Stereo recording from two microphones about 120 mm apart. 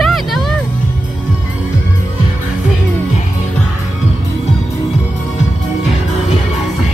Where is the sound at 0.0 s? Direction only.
Centre (ahead or behind).